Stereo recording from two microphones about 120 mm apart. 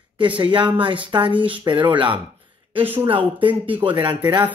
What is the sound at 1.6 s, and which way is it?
Speech, 40° right (ahead or behind).